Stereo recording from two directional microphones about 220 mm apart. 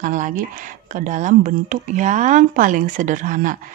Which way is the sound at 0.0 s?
35° right (ahead or behind).